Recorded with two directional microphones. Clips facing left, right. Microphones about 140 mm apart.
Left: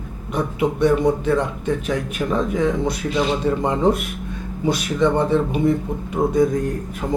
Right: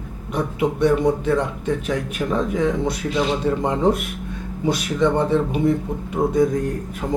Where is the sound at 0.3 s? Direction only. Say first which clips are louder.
Left 1 dB; 20° left (ahead or behind).